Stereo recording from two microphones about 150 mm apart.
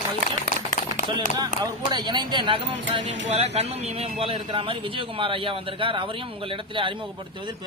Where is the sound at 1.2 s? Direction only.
25° right (ahead or behind).